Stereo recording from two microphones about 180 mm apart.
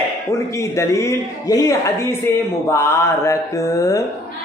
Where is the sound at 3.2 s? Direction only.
15° left (ahead or behind).